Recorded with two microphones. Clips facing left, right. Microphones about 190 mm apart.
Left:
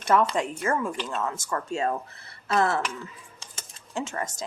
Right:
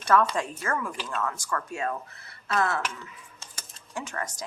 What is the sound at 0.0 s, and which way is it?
A woman's voice, 20° left (ahead or behind).